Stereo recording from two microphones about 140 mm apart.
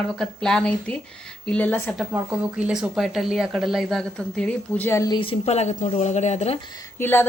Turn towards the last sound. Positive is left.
turn(degrees=15)  # may be behind; listen again after turning